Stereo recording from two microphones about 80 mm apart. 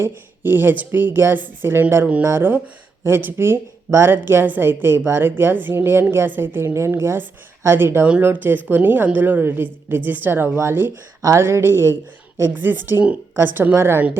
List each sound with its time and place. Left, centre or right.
0.0 s speech: right
8.0 s speech: centre
11.2 s speech: right